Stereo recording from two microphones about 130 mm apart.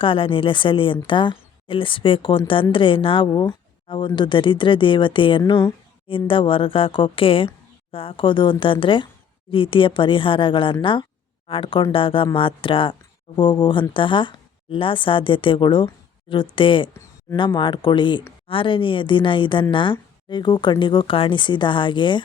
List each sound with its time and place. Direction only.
0.0 s a woman's voice: 40° left (ahead or behind)